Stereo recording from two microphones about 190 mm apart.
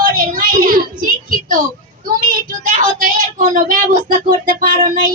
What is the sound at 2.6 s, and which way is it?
Child singing, 45° right (ahead or behind).